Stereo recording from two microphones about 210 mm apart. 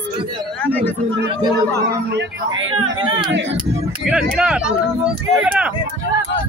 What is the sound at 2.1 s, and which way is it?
Speech, 70° right (ahead or behind).